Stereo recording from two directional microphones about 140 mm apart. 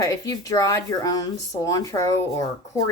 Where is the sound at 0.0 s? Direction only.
25° left (ahead or behind).